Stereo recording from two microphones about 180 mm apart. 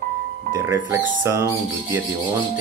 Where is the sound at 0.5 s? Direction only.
15° right (ahead or behind).